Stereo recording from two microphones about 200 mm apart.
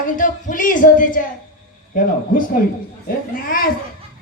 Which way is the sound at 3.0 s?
45° left (ahead or behind).